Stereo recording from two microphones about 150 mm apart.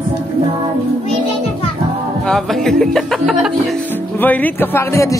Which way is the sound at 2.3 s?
Centre (ahead or behind).